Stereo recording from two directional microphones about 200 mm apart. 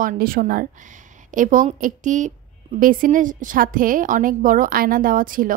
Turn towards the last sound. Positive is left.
turn(degrees=-45)  # may be behind; listen again after turning